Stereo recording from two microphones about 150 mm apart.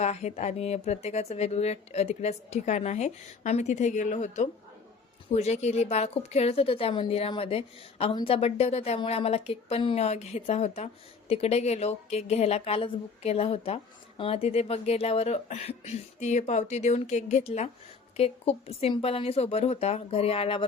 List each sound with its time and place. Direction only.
0.0 s a woman's voice: 50° left (ahead or behind)